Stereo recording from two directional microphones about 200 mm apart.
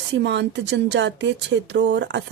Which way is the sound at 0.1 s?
60° right (ahead or behind).